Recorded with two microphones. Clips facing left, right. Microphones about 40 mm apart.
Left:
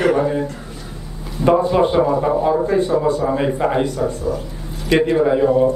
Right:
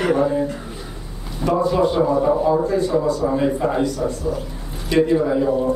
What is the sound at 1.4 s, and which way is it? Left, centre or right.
Speech, left.